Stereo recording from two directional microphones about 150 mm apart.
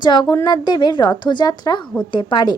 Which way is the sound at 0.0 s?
30° left (ahead or behind).